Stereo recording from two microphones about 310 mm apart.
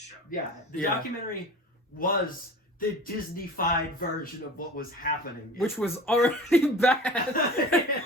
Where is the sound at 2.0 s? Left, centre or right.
Left.